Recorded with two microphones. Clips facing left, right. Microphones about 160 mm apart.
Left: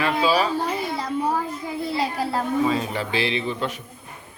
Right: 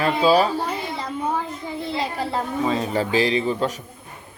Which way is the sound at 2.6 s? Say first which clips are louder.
Right 1 dB; 35° right (ahead or behind).